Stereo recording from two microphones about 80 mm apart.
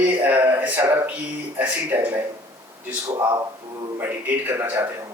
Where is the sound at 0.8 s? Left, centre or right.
Right.